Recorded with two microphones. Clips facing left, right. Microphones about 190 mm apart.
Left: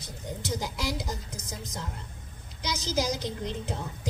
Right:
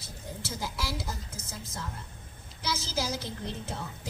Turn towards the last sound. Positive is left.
turn(degrees=15)  # may be behind; listen again after turning